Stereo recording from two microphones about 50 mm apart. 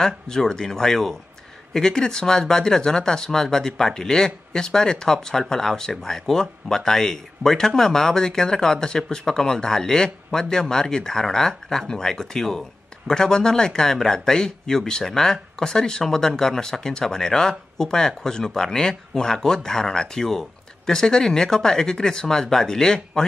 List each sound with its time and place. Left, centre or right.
0.0 s speech: centre